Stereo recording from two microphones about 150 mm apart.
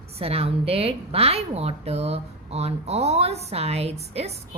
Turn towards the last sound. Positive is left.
turn(degrees=-45)  # may be behind; listen again after turning